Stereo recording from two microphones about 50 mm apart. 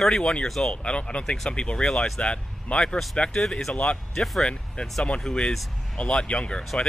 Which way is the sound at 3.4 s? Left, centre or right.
Centre.